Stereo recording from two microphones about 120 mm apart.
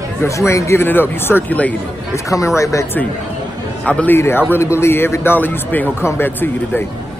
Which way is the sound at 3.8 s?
15° left (ahead or behind).